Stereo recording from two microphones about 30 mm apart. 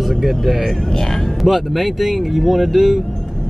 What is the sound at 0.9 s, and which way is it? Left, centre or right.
Speech, centre.